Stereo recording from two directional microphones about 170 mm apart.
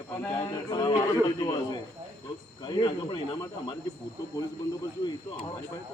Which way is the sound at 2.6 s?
25° left (ahead or behind).